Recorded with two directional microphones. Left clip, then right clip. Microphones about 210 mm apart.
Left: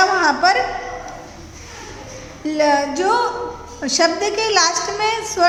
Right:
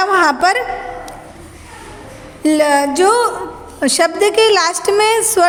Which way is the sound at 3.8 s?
50° right (ahead or behind).